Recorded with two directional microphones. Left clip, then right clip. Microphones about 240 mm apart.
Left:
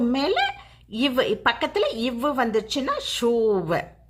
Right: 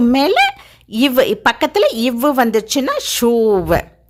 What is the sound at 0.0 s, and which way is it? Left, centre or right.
A woman's voice, right.